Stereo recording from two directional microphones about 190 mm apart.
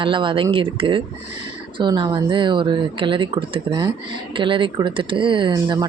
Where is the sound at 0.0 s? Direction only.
25° right (ahead or behind).